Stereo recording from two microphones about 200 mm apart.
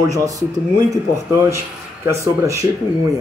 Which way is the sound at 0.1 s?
15° right (ahead or behind).